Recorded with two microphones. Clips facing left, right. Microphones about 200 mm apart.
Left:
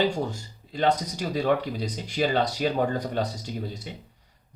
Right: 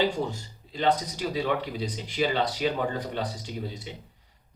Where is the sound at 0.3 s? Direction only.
45° left (ahead or behind).